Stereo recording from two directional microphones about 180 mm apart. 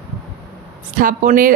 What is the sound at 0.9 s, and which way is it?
Speech, 50° right (ahead or behind).